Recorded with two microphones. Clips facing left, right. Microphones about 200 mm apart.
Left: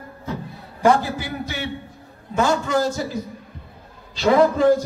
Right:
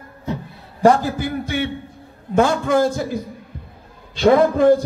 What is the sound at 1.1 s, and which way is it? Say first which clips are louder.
A man's voice: right 6 dB; 50° right (ahead or behind).